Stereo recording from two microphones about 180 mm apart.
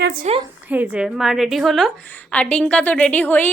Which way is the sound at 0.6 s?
10° right (ahead or behind).